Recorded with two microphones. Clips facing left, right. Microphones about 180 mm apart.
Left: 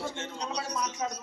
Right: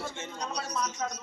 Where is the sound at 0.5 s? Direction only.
10° left (ahead or behind).